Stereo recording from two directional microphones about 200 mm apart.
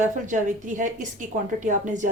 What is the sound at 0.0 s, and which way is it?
A woman's voice, 40° right (ahead or behind).